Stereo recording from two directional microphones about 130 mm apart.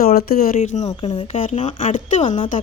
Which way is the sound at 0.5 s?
65° left (ahead or behind).